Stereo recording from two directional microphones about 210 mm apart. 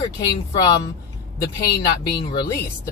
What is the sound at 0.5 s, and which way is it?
Speech, 20° left (ahead or behind).